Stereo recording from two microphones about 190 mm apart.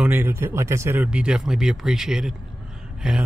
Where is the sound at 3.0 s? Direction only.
5° right (ahead or behind).